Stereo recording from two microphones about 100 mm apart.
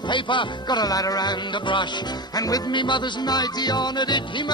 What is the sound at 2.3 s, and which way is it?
Music, 40° left (ahead or behind).